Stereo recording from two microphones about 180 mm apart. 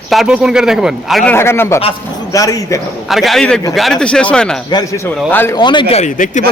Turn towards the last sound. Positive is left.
turn(degrees=40)  # may be behind; listen again after turning